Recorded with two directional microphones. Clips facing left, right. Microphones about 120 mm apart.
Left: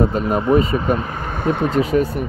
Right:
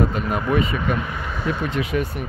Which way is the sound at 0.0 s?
35° left (ahead or behind).